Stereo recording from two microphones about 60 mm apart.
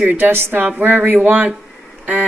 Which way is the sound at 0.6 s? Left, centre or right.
Right.